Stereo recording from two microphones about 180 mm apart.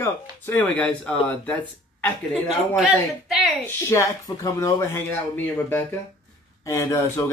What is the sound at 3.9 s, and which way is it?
Speech, 15° left (ahead or behind).